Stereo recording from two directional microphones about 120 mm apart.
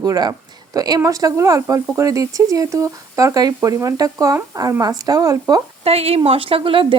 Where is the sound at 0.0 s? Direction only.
30° right (ahead or behind).